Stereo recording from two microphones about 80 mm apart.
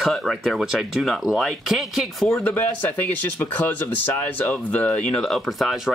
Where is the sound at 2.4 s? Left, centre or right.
Centre.